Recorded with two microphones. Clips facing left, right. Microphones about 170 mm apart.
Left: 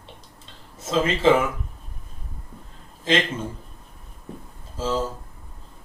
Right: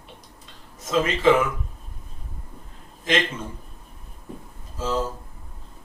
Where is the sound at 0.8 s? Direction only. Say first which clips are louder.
Even; 30° left (ahead or behind).